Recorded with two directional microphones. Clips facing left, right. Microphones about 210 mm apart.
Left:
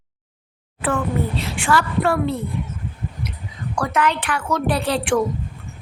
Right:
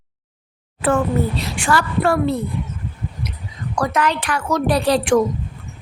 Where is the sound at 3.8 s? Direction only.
40° right (ahead or behind).